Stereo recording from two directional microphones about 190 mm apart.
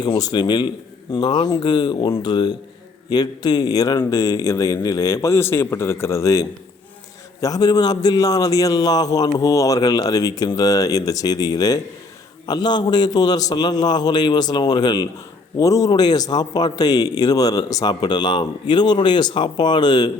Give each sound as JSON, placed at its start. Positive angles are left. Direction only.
{"t": 0.0, "sound": "speech", "side_deg": 20}
{"t": 7.4, "sound": "speech", "side_deg": 20}